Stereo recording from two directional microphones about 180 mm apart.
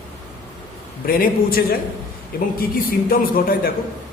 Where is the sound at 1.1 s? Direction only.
55° left (ahead or behind).